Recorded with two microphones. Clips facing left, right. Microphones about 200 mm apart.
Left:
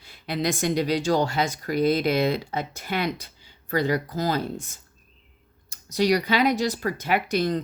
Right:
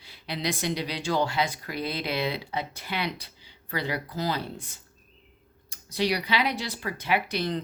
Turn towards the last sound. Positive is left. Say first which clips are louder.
# left 4 dB
turn(degrees=45)  # may be behind; listen again after turning